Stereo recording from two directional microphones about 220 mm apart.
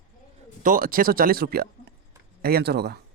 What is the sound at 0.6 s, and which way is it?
A man's voice, 40° right (ahead or behind).